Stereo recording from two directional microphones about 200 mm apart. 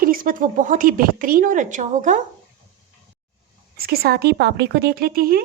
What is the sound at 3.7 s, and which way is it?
Speech, 50° right (ahead or behind).